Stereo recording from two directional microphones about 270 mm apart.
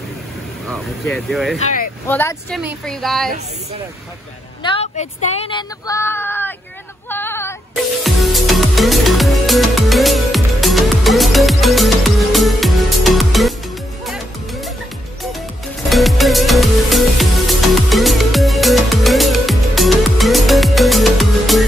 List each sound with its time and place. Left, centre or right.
0.7 s speech: centre
1.6 s speech: left
2.0 s speech: centre
4.6 s speech: left; by 6.5 s centre
7.1 s music: centre
15.9 s music: centre